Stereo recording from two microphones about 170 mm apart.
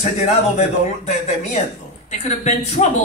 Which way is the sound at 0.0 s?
40° left (ahead or behind).